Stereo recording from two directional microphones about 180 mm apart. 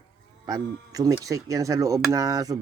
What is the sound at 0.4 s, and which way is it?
Speech, 20° right (ahead or behind).